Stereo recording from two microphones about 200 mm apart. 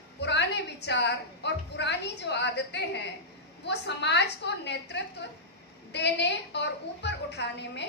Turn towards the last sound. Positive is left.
turn(degrees=60)  # may be behind; listen again after turning